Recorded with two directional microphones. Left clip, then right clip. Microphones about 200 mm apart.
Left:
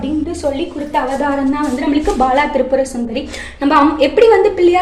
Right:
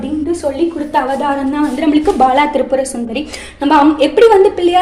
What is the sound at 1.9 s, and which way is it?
A woman's voice, 25° right (ahead or behind).